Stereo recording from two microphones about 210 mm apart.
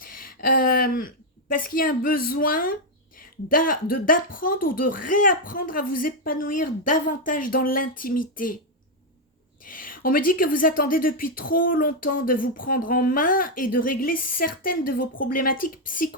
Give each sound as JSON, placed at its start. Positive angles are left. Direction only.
{"t": 0.0, "sound": "a sound", "side_deg": 45}
{"t": 3.2, "sound": "speech", "side_deg": 40}
{"t": 9.6, "sound": "speech", "side_deg": 40}